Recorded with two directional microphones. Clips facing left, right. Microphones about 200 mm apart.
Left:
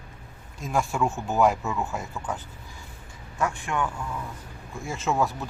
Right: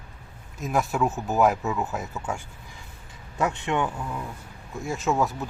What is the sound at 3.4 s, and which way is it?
Speech, 20° right (ahead or behind).